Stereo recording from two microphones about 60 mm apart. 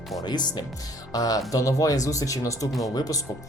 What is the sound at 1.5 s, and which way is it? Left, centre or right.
Speech, left.